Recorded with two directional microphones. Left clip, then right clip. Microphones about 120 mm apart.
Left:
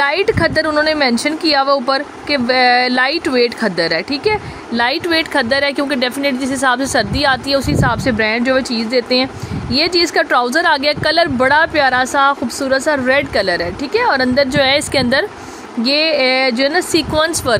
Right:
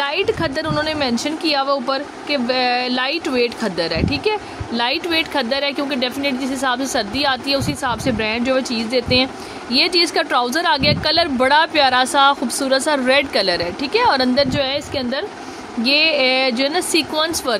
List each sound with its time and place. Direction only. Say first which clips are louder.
0.0 s a woman's voice: left 5 dB; 35° left (ahead or behind)
14.5 s speech: left 7 dB; 50° left (ahead or behind)
15.8 s a woman's voice: left 1 dB; 35° left (ahead or behind)